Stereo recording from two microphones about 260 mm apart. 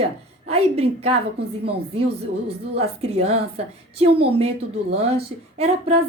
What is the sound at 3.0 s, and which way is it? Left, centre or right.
A woman's voice, right.